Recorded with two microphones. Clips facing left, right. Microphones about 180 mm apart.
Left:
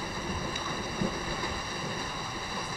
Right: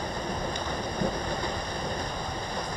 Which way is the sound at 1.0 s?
5° left (ahead or behind).